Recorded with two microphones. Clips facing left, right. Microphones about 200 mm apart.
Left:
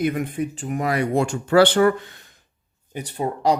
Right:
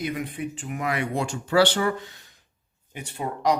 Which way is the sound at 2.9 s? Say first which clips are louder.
Left 5 dB; 35° left (ahead or behind).